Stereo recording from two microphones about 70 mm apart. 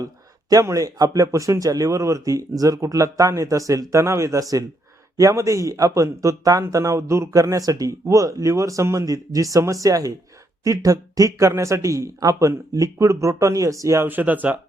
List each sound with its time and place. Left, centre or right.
0.6 s a man's voice: right
14.1 s speech: right